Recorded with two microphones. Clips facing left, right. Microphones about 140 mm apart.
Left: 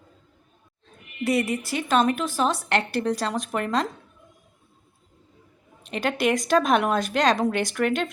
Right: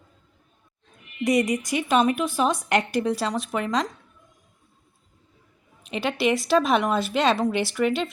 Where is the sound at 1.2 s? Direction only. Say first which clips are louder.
Right 2 dB; 15° right (ahead or behind); by 3.9 s centre (ahead or behind).